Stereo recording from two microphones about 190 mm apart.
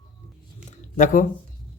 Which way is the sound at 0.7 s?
45° left (ahead or behind).